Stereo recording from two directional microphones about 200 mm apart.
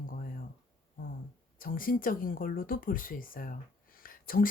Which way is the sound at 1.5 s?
45° left (ahead or behind).